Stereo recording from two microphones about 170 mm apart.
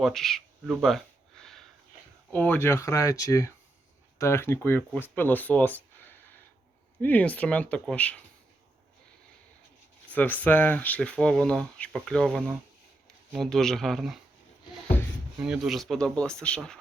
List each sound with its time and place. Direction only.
0.0 s a sound: centre (ahead or behind)
2.3 s speech: 10° left (ahead or behind)
10.1 s speech: 10° left (ahead or behind)
15.4 s speech: 5° right (ahead or behind)